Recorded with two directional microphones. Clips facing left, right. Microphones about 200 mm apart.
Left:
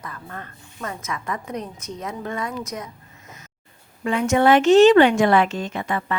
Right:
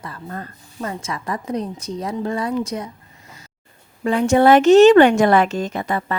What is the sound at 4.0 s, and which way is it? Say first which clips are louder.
A woman's voice: right 4 dB; 35° right (ahead or behind).